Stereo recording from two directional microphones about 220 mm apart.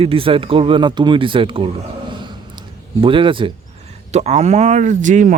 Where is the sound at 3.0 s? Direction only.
25° right (ahead or behind).